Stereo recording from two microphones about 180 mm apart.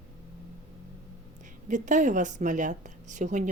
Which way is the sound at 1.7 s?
45° right (ahead or behind).